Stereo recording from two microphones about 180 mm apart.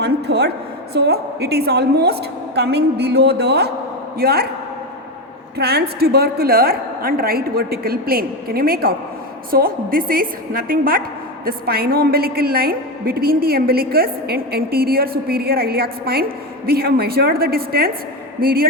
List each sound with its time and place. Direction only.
0.0 s a sound: 65° right (ahead or behind)
0.9 s a woman's voice: 65° right (ahead or behind)
5.5 s a woman's voice: 65° right (ahead or behind)